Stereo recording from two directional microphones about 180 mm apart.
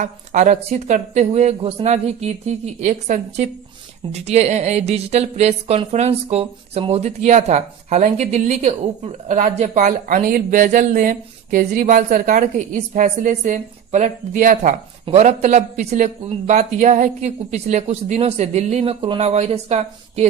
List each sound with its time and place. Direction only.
0.0 s a woman's voice: 45° right (ahead or behind)